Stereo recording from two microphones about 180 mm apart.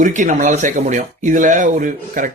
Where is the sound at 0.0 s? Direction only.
45° right (ahead or behind).